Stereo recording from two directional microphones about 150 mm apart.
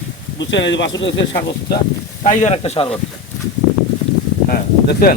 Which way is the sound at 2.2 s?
55° left (ahead or behind).